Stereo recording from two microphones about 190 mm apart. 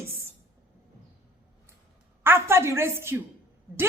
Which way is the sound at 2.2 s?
15° right (ahead or behind).